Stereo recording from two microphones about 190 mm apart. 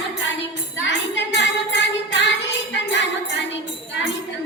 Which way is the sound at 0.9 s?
70° left (ahead or behind).